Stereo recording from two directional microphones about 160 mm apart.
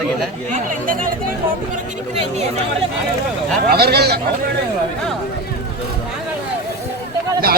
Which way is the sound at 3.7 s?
80° right.